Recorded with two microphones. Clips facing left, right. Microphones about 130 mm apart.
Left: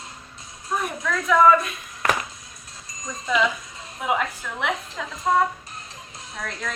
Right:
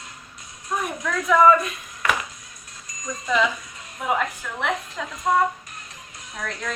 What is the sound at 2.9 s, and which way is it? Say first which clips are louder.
Wind chime: even; 30° left (ahead or behind).